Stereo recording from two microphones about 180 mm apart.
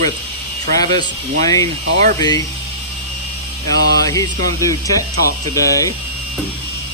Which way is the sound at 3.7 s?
20° left (ahead or behind).